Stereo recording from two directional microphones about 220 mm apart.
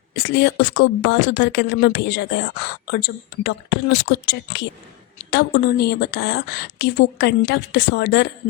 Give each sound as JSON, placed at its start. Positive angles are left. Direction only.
{"t": 0.1, "sound": "a woman's voice", "side_deg": 50}